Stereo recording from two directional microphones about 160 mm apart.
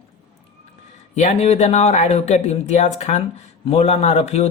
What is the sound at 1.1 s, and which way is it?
Speech, 45° left (ahead or behind).